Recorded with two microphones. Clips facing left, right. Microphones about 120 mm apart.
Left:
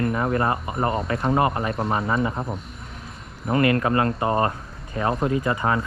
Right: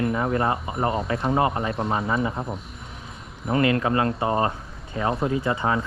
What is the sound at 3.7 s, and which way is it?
Speech, 40° left (ahead or behind).